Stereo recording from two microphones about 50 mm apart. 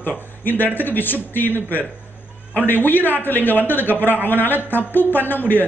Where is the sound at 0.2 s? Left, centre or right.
Left.